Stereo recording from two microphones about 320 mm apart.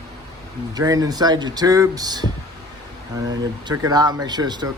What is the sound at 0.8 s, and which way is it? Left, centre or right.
Speech, centre.